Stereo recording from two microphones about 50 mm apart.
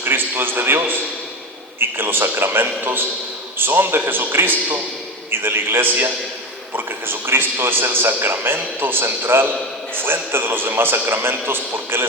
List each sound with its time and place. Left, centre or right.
0.0 s a man's voice: right